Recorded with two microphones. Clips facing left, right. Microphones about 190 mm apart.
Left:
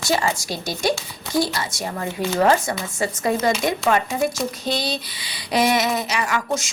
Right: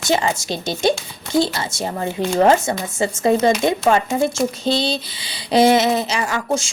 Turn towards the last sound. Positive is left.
turn(degrees=-30)  # may be behind; listen again after turning